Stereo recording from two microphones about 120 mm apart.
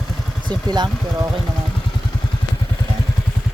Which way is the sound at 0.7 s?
35° right (ahead or behind).